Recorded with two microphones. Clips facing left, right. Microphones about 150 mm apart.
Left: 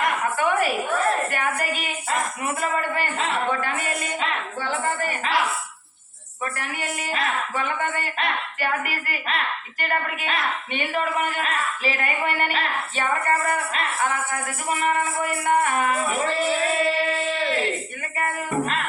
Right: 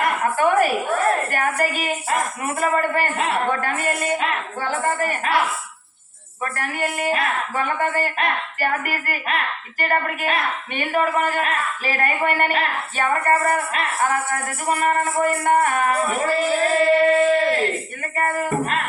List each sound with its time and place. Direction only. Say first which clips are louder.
0.0 s a sound: right 4 dB; 45° right (ahead or behind)
1.3 s a woman's voice: right 4 dB; 45° right (ahead or behind)
6.4 s a woman's voice: right 5 dB; 45° right (ahead or behind)